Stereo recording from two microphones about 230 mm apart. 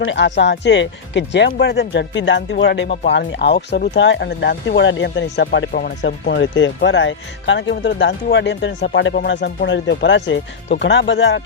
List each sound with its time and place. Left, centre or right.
0.0 s speech: left